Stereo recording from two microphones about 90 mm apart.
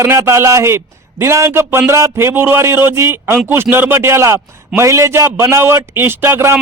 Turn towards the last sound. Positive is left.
turn(degrees=-25)  # may be behind; listen again after turning